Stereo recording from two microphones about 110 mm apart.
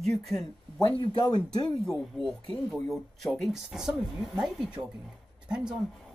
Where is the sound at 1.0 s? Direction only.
40° left (ahead or behind).